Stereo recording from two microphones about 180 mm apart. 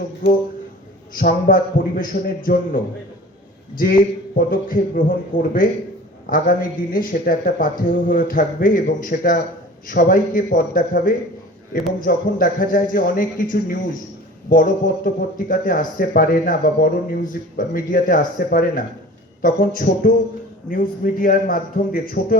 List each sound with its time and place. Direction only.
1.2 s a man's voice: 55° left (ahead or behind)